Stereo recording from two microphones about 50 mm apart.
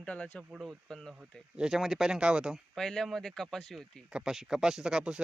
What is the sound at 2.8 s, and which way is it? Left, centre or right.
Speech, centre.